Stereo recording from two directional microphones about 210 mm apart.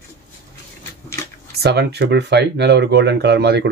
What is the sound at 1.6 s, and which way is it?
Speech, 50° right (ahead or behind).